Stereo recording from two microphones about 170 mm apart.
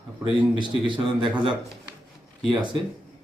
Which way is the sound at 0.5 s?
25° right (ahead or behind).